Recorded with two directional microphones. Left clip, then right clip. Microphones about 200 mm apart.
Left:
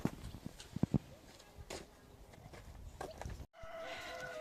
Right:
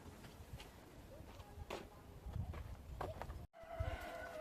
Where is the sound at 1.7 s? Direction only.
50° left (ahead or behind).